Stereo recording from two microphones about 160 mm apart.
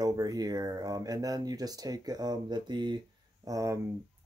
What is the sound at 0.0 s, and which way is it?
Speech, 25° right (ahead or behind).